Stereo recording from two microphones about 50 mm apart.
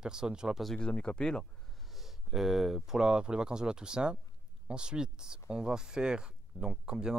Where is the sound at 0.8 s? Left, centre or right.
Left.